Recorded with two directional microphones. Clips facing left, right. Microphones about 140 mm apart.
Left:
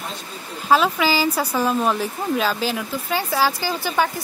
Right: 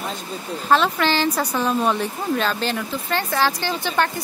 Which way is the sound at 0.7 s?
5° left (ahead or behind).